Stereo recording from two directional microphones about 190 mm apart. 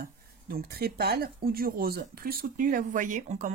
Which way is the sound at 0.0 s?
55° right (ahead or behind).